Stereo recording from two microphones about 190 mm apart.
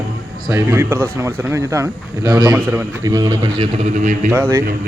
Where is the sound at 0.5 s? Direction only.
15° right (ahead or behind).